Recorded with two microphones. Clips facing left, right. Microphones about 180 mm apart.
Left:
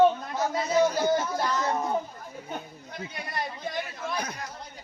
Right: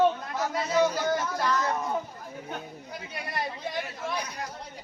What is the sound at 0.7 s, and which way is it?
Speech, 25° left (ahead or behind).